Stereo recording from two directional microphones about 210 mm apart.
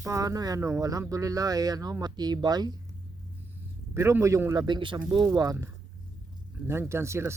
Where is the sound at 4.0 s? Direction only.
15° right (ahead or behind).